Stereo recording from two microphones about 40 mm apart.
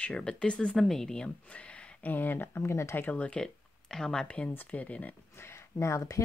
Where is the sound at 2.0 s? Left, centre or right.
Left.